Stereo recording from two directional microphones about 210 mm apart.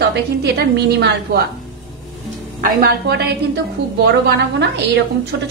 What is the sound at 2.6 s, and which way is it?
A woman's voice, 50° right (ahead or behind).